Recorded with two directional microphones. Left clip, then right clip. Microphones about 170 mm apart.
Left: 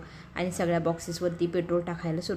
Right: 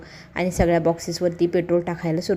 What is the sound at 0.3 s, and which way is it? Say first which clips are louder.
A woman's voice: right 8 dB; 25° right (ahead or behind).